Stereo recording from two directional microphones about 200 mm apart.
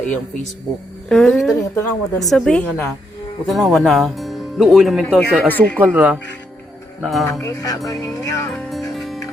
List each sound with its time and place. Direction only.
1.0 s speech: 5° left (ahead or behind)
5.8 s speech: 10° right (ahead or behind)
7.4 s music: 15° left (ahead or behind)
9.0 s music: centre (ahead or behind)